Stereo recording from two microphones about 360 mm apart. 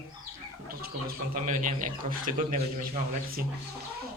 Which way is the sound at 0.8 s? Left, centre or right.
Right.